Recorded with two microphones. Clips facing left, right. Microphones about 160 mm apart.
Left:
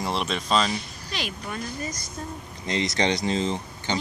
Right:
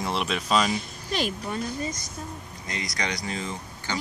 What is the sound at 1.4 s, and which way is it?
Speech, 25° right (ahead or behind).